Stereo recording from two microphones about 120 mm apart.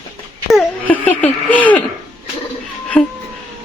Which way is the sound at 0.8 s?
15° left (ahead or behind).